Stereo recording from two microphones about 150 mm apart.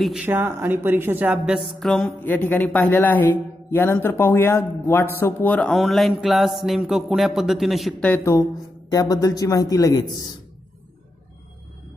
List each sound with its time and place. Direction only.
0.0 s speech: 5° right (ahead or behind)
2.2 s a man's voice: 10° left (ahead or behind)
8.0 s a man's voice: 15° left (ahead or behind)